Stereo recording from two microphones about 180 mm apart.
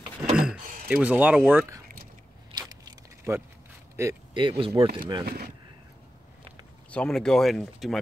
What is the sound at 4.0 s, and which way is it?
Speech, 15° right (ahead or behind).